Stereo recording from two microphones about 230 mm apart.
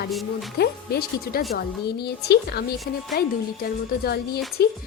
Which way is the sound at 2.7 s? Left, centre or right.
Centre.